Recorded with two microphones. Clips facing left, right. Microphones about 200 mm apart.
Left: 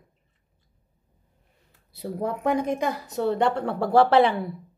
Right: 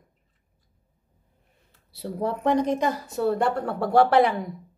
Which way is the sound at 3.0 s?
20° left (ahead or behind).